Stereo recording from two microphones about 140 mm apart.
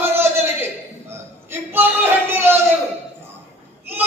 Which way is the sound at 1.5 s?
15° right (ahead or behind).